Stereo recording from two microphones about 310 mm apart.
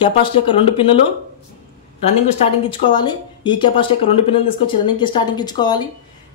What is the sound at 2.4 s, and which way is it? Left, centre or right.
A woman's voice, centre.